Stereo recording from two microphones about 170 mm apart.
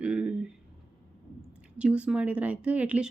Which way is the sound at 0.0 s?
5° right (ahead or behind).